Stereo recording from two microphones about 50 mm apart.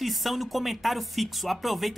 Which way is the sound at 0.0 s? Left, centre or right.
Centre.